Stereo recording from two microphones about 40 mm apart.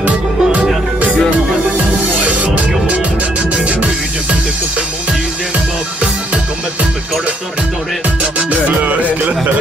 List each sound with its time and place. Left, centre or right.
0.0 s music: right
2.2 s music: right
8.2 s music: right